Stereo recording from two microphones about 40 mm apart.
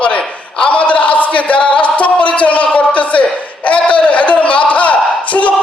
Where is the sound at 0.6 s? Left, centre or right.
Left.